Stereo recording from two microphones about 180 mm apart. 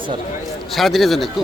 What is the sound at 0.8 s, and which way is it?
Speech, centre (ahead or behind).